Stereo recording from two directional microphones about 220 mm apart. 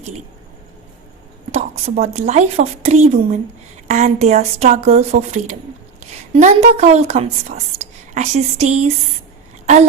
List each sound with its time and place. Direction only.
1.5 s a woman's voice: 30° right (ahead or behind)